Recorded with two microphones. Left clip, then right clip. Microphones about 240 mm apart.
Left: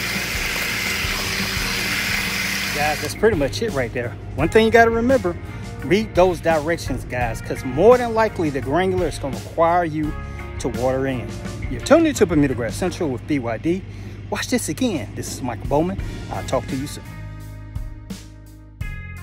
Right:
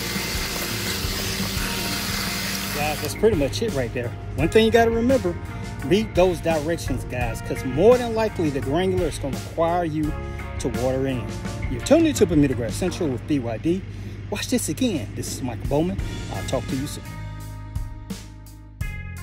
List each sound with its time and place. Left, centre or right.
0.0 s music: centre
0.6 s music: left
1.1 s water: centre
1.6 s music: left
2.6 s vehicle: left
3.1 s speech: centre